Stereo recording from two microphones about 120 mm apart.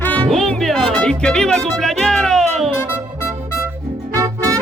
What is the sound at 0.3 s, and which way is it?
Music, centre (ahead or behind).